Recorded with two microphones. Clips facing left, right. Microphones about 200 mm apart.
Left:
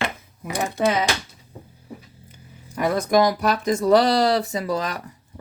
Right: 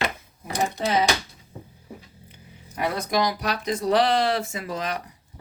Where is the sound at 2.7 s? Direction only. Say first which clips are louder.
Left 6 dB; 45° left (ahead or behind).